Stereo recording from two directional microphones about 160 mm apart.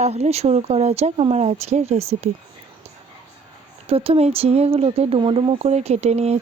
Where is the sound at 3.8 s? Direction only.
35° right (ahead or behind).